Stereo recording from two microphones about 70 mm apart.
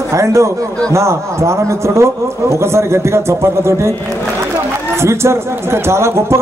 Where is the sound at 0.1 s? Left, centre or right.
Right.